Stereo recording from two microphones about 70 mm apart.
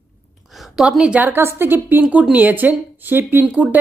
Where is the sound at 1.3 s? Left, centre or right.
Right.